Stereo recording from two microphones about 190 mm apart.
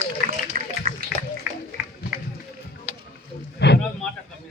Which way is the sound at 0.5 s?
45° right (ahead or behind).